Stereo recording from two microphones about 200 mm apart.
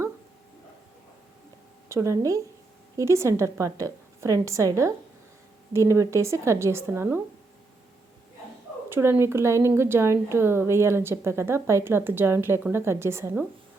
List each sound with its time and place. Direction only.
1.9 s a woman's voice: 15° right (ahead or behind)
8.9 s a woman's voice: 10° right (ahead or behind)